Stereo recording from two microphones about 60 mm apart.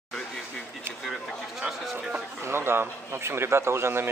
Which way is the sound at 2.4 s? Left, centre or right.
Right.